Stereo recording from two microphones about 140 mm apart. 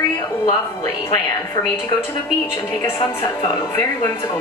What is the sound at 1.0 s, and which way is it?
Speech, 20° left (ahead or behind).